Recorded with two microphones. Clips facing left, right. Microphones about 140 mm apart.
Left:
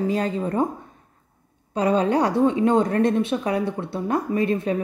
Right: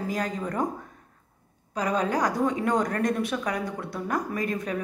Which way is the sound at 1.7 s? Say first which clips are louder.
Left 6 dB; 30° left (ahead or behind).